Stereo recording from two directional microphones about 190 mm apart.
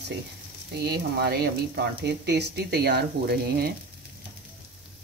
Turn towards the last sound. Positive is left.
turn(degrees=-55)  # may be behind; listen again after turning